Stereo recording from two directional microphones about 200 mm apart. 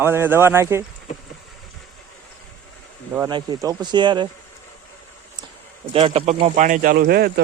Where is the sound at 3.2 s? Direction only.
20° right (ahead or behind).